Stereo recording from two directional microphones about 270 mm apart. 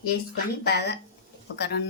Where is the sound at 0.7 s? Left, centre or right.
Left.